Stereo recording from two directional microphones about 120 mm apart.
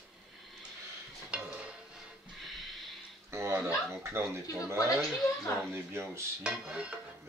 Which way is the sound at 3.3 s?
20° right (ahead or behind).